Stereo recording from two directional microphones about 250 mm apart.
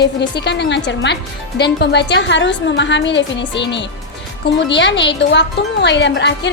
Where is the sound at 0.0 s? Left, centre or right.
Left.